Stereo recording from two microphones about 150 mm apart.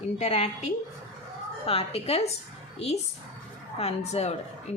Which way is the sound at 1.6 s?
40° left (ahead or behind).